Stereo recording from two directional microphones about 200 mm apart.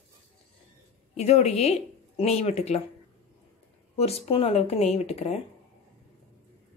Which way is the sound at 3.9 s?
30° left (ahead or behind).